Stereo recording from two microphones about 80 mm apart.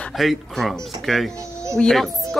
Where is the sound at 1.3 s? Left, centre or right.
Right.